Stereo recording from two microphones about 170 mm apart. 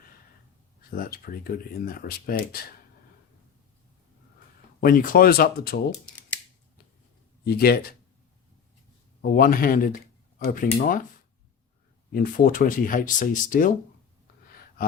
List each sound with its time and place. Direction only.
0.9 s speech: 60° left (ahead or behind)
4.8 s speech: 55° left (ahead or behind)
7.4 s speech: 65° left (ahead or behind)
9.2 s speech: 55° left (ahead or behind)
12.1 s speech: 55° left (ahead or behind)